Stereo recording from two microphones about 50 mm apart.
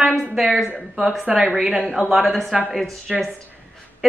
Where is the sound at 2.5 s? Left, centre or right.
Centre.